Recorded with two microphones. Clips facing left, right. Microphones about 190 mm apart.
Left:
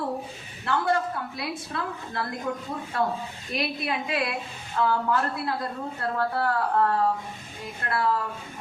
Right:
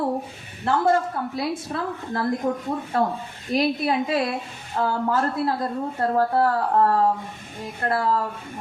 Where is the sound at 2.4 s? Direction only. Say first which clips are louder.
Right 4 dB; 50° right (ahead or behind).